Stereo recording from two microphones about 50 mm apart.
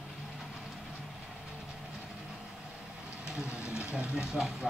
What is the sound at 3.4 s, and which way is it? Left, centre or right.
Vehicle, right.